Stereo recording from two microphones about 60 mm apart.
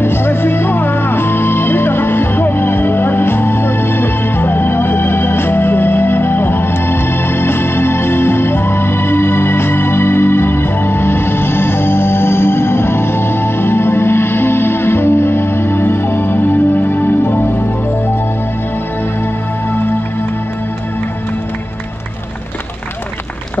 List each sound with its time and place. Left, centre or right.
0.0 s music: left